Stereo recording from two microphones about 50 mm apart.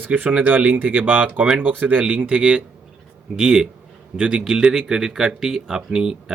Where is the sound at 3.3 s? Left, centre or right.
Centre.